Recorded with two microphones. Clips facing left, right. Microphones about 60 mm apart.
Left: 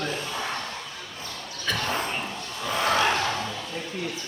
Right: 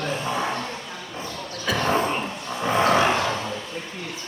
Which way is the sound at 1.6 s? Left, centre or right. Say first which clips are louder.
Right 6 dB; centre.